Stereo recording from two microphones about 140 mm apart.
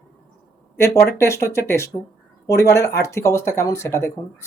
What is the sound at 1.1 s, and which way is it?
Speech, 20° left (ahead or behind).